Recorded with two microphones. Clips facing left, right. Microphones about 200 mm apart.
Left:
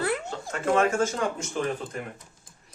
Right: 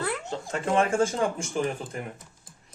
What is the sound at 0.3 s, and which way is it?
Speech, 30° right (ahead or behind).